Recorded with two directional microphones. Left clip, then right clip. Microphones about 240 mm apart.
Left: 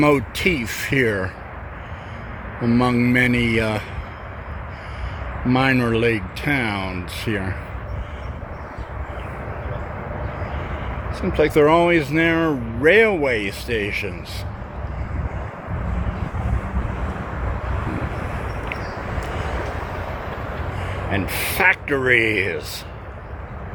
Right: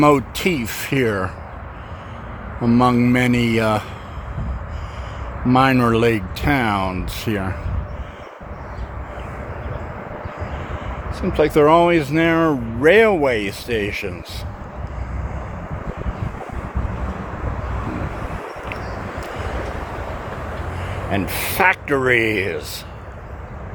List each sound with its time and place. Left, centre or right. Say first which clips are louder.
0.0 s speech: right 2 dB; centre
2.6 s speech: right 3 dB; centre
5.5 s speech: right 4 dB; centre
11.2 s speech: right 1 dB; centre
19.4 s waves: even; right
21.1 s speech: right 1 dB; centre